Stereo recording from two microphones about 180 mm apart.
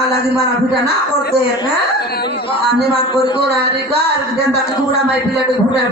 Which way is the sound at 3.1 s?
30° left (ahead or behind).